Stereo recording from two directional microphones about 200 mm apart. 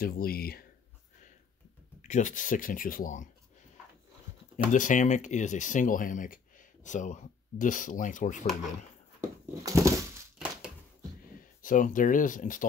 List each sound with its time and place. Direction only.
0.0 s speech: 50° left (ahead or behind)
2.0 s speech: 35° left (ahead or behind)
4.7 s speech: 40° left (ahead or behind)
9.6 s a sound: 15° right (ahead or behind)
11.6 s speech: 40° left (ahead or behind)